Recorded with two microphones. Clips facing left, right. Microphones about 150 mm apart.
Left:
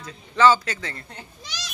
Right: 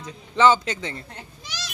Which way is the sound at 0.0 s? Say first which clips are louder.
Even; 20° right (ahead or behind).